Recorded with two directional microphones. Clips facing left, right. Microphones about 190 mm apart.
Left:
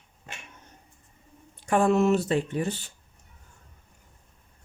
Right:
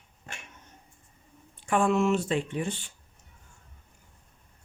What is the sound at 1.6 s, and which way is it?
Speech, 40° left (ahead or behind).